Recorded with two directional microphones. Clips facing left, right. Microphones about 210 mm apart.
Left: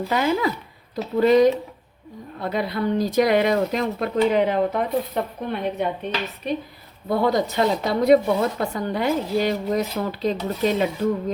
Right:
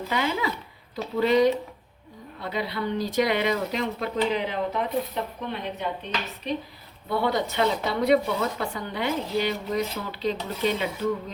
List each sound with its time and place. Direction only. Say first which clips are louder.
0.1 s speech: left 5 dB; 45° left (ahead or behind)
7.1 s speech: left 5 dB; 40° left (ahead or behind)